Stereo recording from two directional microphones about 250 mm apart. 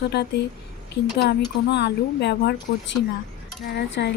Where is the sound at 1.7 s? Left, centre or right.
Left.